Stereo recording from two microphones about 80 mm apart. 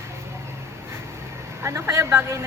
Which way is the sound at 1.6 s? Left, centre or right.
Right.